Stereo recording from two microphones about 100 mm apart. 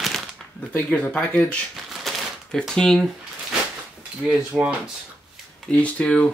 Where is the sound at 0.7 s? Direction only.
15° left (ahead or behind).